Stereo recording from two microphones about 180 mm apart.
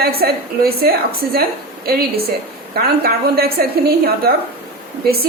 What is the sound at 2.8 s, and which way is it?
Speech, 55° right (ahead or behind).